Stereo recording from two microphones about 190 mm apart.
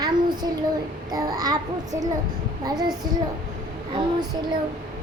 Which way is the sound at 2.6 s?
20° right (ahead or behind).